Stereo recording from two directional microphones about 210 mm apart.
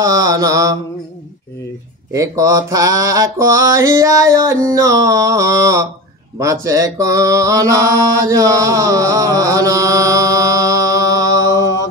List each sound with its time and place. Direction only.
0.0 s mantra: 15° right (ahead or behind)
2.1 s mantra: 15° right (ahead or behind)